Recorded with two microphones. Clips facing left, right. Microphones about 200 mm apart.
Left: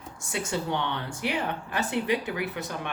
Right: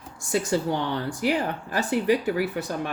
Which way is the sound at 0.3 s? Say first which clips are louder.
Right 6 dB; 35° right (ahead or behind).